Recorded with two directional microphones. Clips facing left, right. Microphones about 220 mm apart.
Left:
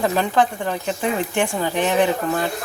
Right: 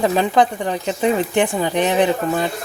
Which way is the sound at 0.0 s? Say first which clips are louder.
Right 3 dB; 15° right (ahead or behind).